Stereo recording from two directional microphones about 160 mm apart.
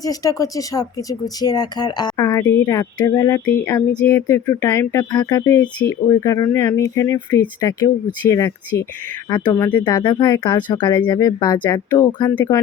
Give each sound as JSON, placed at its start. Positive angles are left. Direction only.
{"t": 0.0, "sound": "speech", "side_deg": 20}
{"t": 12.3, "sound": "speech", "side_deg": 10}